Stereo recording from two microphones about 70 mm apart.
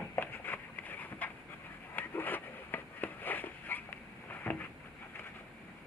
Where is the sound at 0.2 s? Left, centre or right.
Left.